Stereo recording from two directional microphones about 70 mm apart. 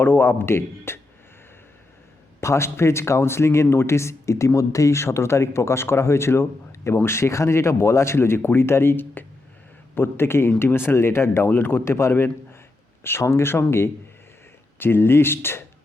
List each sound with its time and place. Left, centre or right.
0.0 s speech: left
2.4 s speech: left